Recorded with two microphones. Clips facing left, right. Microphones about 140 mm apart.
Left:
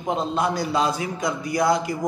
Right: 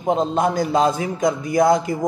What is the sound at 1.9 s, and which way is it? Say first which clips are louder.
Speech: right 4 dB; 25° right (ahead or behind).